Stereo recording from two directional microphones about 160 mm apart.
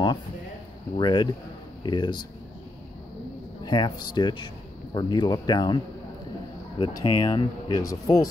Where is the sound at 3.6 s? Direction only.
25° left (ahead or behind).